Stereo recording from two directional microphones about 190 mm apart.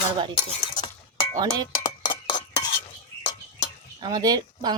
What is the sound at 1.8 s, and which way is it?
Dishes, 25° left (ahead or behind).